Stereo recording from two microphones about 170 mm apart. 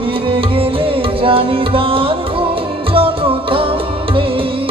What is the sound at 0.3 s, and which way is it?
Music, 30° right (ahead or behind).